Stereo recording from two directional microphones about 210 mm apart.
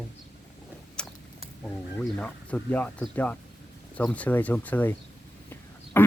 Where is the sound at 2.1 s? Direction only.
5° left (ahead or behind).